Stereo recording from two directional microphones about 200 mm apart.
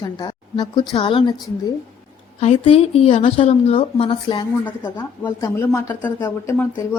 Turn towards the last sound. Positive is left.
turn(degrees=15)  # may be behind; listen again after turning